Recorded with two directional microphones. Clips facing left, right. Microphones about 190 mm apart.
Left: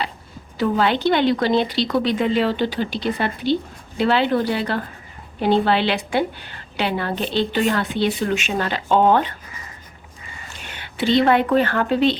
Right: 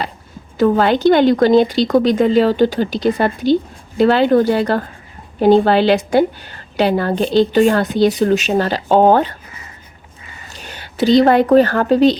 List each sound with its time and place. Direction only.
0.5 s a woman's voice: 45° right (ahead or behind)
10.5 s speech: 40° right (ahead or behind)